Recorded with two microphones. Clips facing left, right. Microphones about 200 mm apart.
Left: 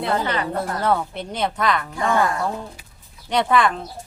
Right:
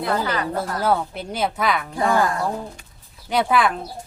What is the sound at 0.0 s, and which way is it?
Speech, 25° left (ahead or behind).